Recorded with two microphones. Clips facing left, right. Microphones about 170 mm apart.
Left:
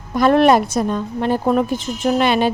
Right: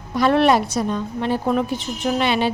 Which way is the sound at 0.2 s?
45° left (ahead or behind).